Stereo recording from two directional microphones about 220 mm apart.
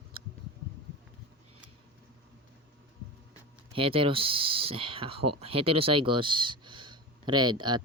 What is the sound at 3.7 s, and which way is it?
Speech, 25° right (ahead or behind).